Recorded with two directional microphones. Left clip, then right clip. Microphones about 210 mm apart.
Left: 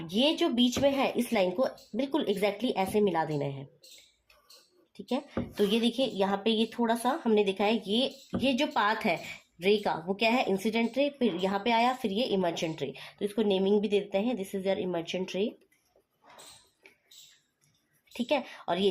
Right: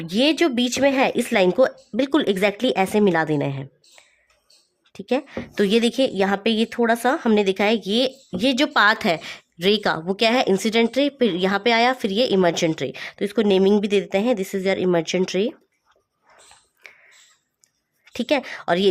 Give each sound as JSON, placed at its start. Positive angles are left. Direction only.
{"t": 0.0, "sound": "a woman's voice", "side_deg": -45}
{"t": 4.9, "sound": "a woman's voice", "side_deg": -50}
{"t": 18.1, "sound": "a woman's voice", "side_deg": -45}